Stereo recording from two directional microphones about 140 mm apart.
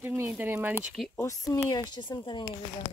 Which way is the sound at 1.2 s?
25° left (ahead or behind).